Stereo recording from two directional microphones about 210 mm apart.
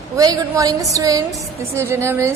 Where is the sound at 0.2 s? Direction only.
20° right (ahead or behind).